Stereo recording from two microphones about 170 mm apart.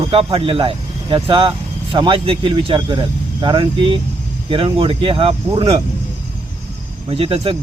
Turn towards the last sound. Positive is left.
turn(degrees=-35)  # may be behind; listen again after turning